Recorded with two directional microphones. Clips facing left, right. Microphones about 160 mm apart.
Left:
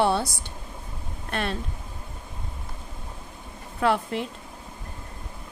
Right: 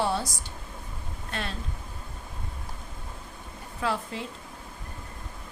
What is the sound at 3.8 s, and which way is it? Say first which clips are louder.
Speech: left 7 dB; 65° left (ahead or behind).